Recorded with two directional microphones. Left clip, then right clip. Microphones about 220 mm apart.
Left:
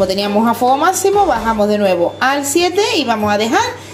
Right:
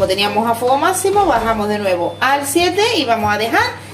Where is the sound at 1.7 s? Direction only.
35° left (ahead or behind).